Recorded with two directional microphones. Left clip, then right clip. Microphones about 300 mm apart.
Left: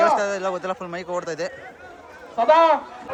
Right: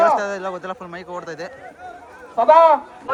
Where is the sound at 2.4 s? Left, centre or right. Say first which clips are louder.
Right 4 dB; centre.